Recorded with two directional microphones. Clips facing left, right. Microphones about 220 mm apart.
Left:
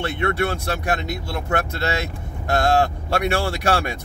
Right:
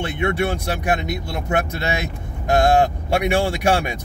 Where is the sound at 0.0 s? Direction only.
15° right (ahead or behind).